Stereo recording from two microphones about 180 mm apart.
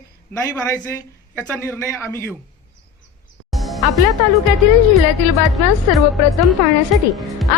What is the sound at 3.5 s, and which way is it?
Music, centre (ahead or behind).